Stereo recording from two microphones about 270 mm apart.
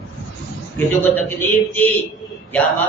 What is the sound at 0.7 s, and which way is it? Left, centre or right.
A man's voice, centre.